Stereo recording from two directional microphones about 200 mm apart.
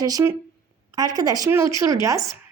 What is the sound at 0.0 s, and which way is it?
A woman's voice, 15° right (ahead or behind).